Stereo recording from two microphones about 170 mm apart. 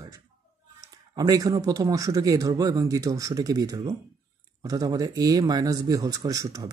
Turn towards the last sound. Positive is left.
turn(degrees=-20)  # may be behind; listen again after turning